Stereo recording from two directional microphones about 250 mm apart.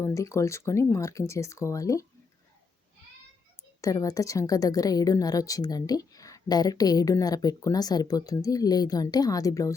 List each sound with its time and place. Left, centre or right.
0.0 s a woman's voice: centre
3.8 s a woman's voice: centre